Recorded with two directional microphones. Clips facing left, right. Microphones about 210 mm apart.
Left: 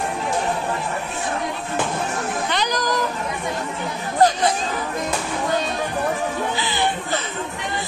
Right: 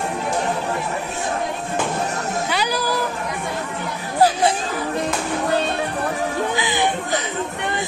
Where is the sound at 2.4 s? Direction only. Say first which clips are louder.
Right 1 dB; 5° right (ahead or behind).